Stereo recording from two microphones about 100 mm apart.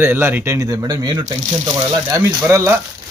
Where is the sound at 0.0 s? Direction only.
20° right (ahead or behind).